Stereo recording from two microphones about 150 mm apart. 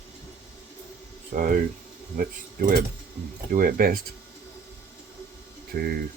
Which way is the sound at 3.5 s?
70° right (ahead or behind).